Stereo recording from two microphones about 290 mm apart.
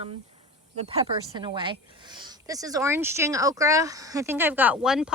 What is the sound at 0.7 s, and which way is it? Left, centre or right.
Speech, right.